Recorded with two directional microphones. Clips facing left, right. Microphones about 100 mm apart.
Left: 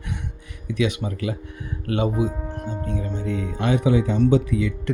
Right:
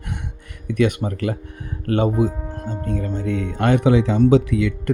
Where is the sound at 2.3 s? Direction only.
5° right (ahead or behind).